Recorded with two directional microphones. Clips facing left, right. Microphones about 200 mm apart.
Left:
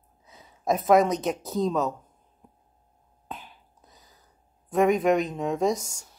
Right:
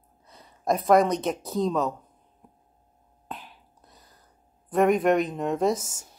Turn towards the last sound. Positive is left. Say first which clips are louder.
# right 1 dB
turn(degrees=0)  # may be behind; listen again after turning